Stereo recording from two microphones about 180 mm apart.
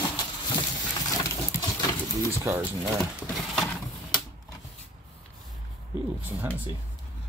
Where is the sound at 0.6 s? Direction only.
20° left (ahead or behind).